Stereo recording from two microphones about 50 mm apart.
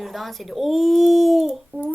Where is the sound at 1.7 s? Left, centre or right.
Right.